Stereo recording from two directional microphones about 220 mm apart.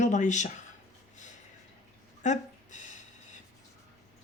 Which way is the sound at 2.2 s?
35° left (ahead or behind).